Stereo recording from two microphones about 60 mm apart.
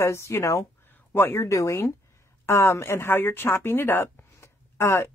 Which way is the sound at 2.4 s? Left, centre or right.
Left.